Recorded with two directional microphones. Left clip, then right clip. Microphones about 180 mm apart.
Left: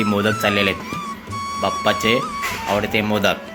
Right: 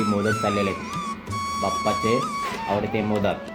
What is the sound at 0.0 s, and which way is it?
Speech, centre (ahead or behind).